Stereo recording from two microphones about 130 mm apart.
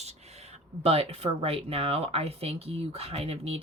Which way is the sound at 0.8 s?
50° right (ahead or behind).